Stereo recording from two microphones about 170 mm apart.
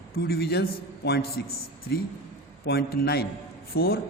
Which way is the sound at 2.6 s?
70° left (ahead or behind).